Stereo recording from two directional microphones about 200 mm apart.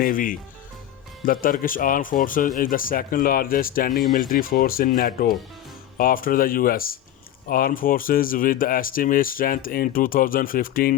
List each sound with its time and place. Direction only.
0.0 s speech: 45° left (ahead or behind)